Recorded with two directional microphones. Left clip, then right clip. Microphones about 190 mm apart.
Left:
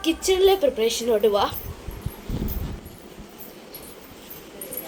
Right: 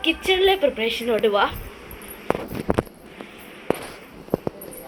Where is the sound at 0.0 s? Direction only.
15° left (ahead or behind).